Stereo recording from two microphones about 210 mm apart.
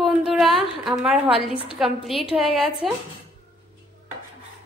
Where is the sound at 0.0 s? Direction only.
Centre (ahead or behind).